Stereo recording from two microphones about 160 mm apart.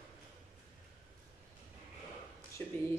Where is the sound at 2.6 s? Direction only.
15° left (ahead or behind).